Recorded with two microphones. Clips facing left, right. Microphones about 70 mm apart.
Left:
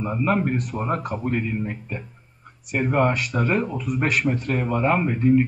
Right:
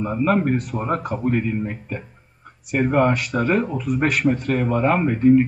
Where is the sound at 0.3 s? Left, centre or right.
Right.